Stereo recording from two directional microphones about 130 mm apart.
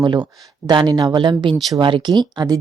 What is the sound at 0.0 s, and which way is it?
Speech, 35° right (ahead or behind).